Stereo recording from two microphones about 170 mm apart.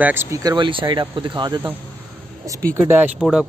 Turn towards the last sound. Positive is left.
turn(degrees=-5)  # may be behind; listen again after turning